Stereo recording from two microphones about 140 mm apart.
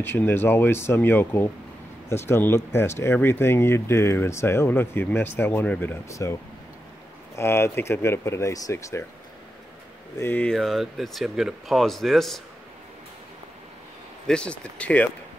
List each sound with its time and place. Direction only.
0.0 s speech: 15° left (ahead or behind)
7.3 s speech: 15° left (ahead or behind)
10.1 s speech: 15° left (ahead or behind)
10.5 s speech: centre (ahead or behind)
14.2 s speech: 5° left (ahead or behind)